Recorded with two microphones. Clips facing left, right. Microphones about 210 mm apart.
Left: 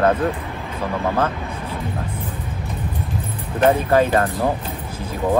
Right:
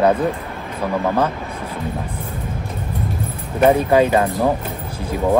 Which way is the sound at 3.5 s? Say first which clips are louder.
Right 2 dB; 15° right (ahead or behind).